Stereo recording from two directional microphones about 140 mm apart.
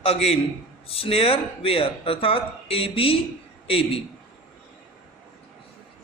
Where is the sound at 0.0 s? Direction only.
45° left (ahead or behind).